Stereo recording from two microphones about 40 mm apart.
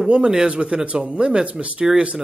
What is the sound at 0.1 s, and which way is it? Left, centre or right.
Speech, right.